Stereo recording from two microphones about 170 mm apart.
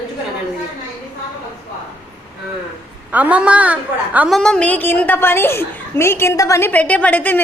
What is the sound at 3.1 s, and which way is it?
A woman's voice, 10° right (ahead or behind).